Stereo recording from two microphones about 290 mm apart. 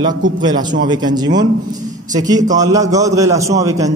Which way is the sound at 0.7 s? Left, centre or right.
Centre.